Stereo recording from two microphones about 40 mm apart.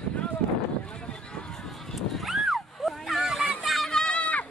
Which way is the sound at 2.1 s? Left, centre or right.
Centre.